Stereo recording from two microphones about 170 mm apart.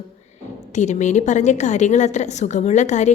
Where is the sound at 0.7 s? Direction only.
45° left (ahead or behind).